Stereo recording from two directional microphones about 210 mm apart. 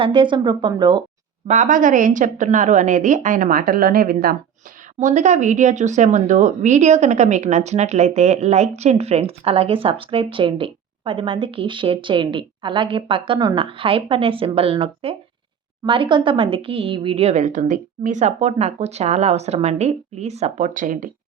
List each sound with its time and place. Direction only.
0.0 s speech: 25° right (ahead or behind)
1.5 s a woman's voice: 40° right (ahead or behind)